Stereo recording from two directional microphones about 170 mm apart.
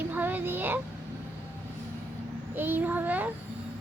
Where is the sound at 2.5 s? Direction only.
10° right (ahead or behind).